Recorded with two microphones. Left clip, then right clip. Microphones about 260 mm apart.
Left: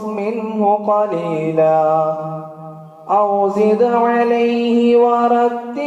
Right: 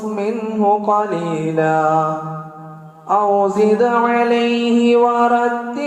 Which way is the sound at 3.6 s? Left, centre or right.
Right.